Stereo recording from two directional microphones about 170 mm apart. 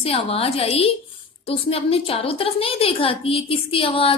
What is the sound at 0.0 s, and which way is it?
A woman's voice, 35° left (ahead or behind).